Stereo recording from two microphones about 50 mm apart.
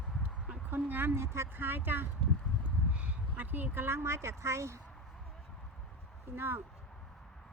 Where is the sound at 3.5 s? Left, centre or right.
Right.